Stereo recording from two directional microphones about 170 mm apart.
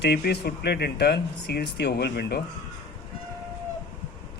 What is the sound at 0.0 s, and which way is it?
Speech, 75° left (ahead or behind).